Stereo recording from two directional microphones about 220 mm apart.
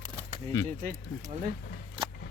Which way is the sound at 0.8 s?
40° right (ahead or behind).